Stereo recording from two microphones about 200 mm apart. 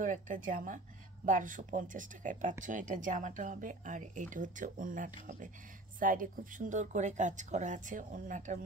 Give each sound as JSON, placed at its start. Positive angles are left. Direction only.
{"t": 0.0, "sound": "speech", "side_deg": -40}